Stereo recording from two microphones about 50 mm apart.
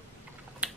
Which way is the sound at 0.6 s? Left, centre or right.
Right.